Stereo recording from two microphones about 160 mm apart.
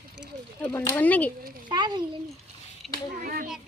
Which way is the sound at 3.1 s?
65° right (ahead or behind).